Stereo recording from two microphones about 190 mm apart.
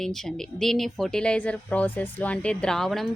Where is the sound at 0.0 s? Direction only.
Centre (ahead or behind).